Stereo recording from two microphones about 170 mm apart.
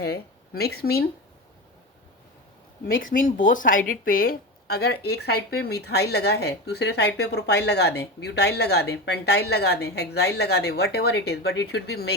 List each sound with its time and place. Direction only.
0.0 s speech: 70° left (ahead or behind)
2.8 s speech: 55° left (ahead or behind); by 12.1 s 75° left (ahead or behind)